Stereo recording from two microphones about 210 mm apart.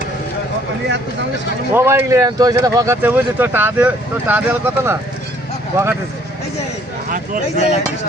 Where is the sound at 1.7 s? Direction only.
10° right (ahead or behind).